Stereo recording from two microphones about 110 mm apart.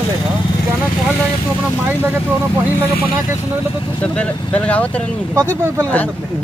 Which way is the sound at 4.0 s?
10° left (ahead or behind).